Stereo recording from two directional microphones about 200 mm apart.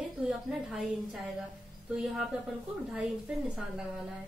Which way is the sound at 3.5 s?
5° right (ahead or behind).